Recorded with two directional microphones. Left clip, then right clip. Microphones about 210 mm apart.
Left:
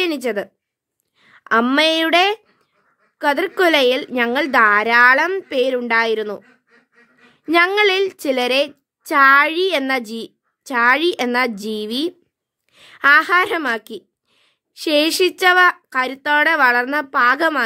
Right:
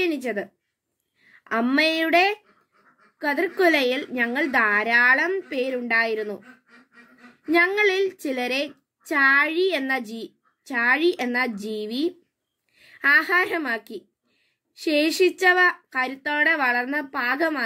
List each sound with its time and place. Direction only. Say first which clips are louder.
0.0 s a woman's voice: left 5 dB; 40° left (ahead or behind)
7.5 s a woman's voice: left 5 dB; 40° left (ahead or behind)